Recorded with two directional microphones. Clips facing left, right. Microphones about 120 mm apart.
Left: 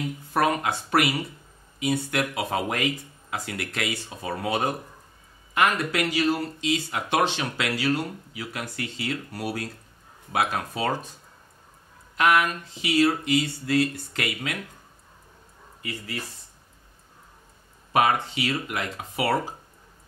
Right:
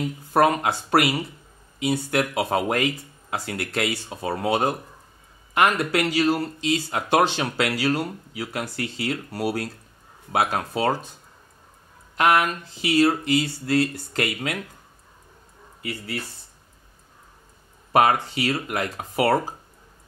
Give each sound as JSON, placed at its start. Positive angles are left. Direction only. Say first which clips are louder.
{"t": 0.3, "sound": "speech", "louder": "right 4 dB", "side_deg": -35}
{"t": 12.2, "sound": "speech", "louder": "right 2 dB", "side_deg": -30}
{"t": 17.9, "sound": "speech", "louder": "right 3 dB", "side_deg": -40}